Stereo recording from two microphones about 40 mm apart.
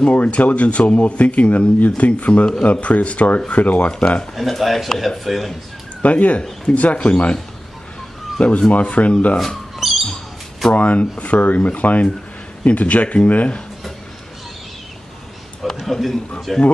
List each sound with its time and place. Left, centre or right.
0.0 s speech: left
4.4 s speech: centre
6.0 s speech: left
8.4 s speech: left
9.8 s a sound: centre
10.7 s speech: left
15.8 s speech: centre